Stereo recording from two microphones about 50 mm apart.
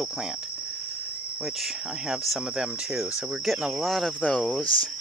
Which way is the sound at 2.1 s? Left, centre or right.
Centre.